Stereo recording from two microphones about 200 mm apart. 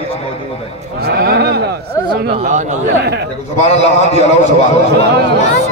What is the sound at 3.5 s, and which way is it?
Speech, 35° left (ahead or behind).